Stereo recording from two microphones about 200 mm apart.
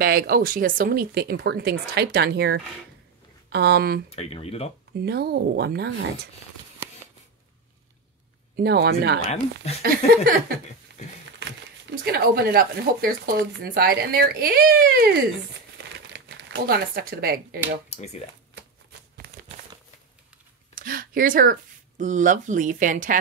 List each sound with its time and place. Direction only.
0.0 s speech: 45° right (ahead or behind)
4.1 s speech: 30° left (ahead or behind)
5.0 s speech: 55° right (ahead or behind)
8.5 s speech: 55° right (ahead or behind)
11.9 s speech: 50° right (ahead or behind)
19.1 s crumpling: 50° right (ahead or behind)
20.7 s speech: 45° right (ahead or behind)